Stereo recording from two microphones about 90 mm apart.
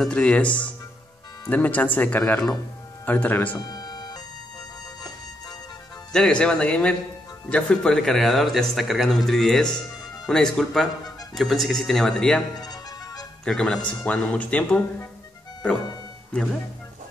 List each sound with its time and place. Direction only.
0.0 s speech: 10° left (ahead or behind)
3.5 s music: 50° left (ahead or behind)
6.1 s speech: 10° left (ahead or behind)
12.5 s music: 45° left (ahead or behind)
13.5 s speech: 10° left (ahead or behind)
16.3 s speech: 10° left (ahead or behind)